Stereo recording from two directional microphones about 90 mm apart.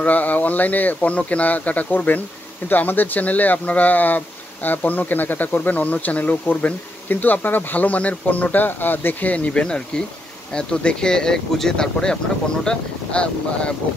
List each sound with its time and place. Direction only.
0.0 s speech: 15° left (ahead or behind)